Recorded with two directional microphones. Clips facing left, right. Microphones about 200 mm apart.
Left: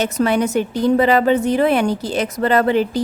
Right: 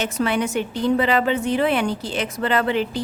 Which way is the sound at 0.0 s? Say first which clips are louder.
Left 5 dB; 40° left (ahead or behind).